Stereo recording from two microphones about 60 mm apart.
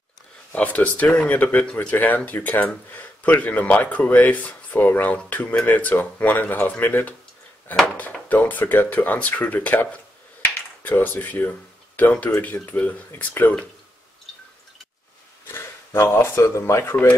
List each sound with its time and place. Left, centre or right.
0.6 s speech: left
8.3 s speech: left
15.4 s speech: left